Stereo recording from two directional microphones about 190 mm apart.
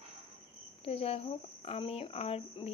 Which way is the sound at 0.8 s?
30° left (ahead or behind).